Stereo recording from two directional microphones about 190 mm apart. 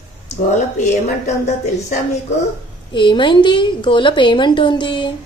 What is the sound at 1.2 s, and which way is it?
Speech, 35° left (ahead or behind).